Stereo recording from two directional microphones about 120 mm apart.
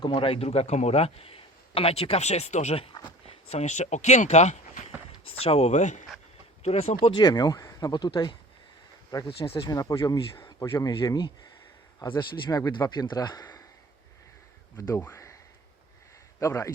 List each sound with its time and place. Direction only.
0.0 s a man's voice: 45° left (ahead or behind)
3.2 s speech: 65° left (ahead or behind)
5.2 s a man's voice: 55° left (ahead or behind); by 6.1 s 90° left
6.6 s a man's voice: 60° left (ahead or behind)
7.1 s speech: 40° left (ahead or behind)
9.2 s speech: 50° left (ahead or behind)
9.6 s speech: 30° left (ahead or behind)
10.3 s a sound: 20° left (ahead or behind)
10.8 s speech: 30° left (ahead or behind)
14.8 s speech: 25° left (ahead or behind)
16.4 s speech: 25° left (ahead or behind)